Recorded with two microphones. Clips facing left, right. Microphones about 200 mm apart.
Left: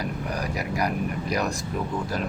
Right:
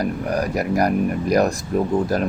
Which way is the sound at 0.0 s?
50° right (ahead or behind).